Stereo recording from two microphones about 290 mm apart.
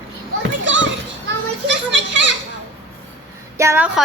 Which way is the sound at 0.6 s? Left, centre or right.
Right.